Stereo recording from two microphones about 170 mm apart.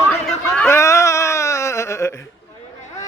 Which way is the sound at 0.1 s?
5° left (ahead or behind).